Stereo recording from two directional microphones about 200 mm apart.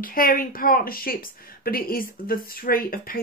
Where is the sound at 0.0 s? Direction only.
45° left (ahead or behind).